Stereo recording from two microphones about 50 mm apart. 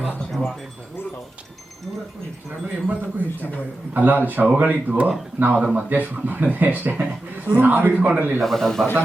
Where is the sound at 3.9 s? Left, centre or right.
Right.